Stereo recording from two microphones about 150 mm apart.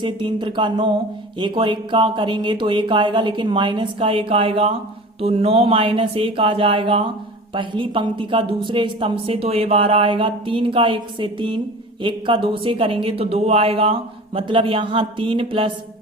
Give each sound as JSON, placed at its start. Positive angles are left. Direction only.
{"t": 0.0, "sound": "a woman's voice", "side_deg": -30}